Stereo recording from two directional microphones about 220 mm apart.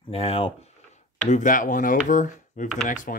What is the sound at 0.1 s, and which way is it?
Speech, 25° left (ahead or behind).